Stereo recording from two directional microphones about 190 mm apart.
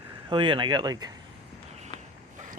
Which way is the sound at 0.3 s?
25° right (ahead or behind).